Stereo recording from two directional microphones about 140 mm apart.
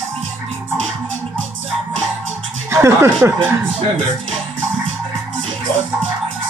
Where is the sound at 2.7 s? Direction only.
20° right (ahead or behind).